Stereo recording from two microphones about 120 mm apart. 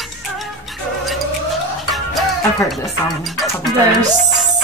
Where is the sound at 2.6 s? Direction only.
Centre (ahead or behind).